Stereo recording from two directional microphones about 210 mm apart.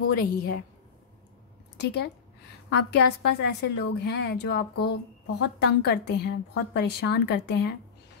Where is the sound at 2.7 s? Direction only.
50° left (ahead or behind).